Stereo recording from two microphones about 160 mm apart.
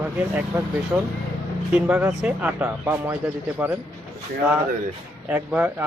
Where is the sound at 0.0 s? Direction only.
10° right (ahead or behind).